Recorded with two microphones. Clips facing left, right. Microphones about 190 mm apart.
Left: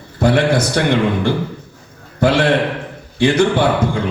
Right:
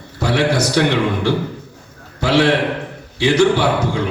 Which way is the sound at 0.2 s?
55° left (ahead or behind).